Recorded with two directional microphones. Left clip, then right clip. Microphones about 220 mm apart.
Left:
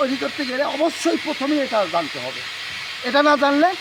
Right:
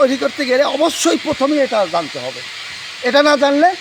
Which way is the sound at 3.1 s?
25° right (ahead or behind).